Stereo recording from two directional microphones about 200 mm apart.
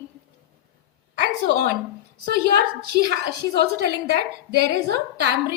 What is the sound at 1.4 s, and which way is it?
A woman's voice, 55° right (ahead or behind).